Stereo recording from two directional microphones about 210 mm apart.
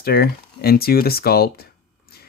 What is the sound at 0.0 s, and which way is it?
Speech, 45° left (ahead or behind).